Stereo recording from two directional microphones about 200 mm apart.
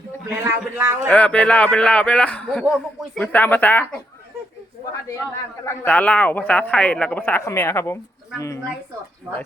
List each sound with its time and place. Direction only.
0.4 s speech: 15° right (ahead or behind)
1.1 s a man's voice: 5° left (ahead or behind)
5.6 s a man's voice: 10° left (ahead or behind)